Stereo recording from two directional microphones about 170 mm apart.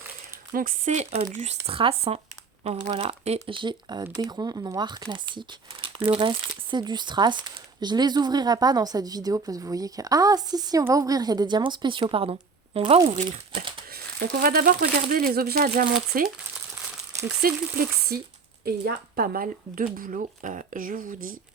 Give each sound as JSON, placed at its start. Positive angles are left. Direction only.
{"t": 0.5, "sound": "speech", "side_deg": -55}
{"t": 13.9, "sound": "speech", "side_deg": -60}
{"t": 17.4, "sound": "speech", "side_deg": -60}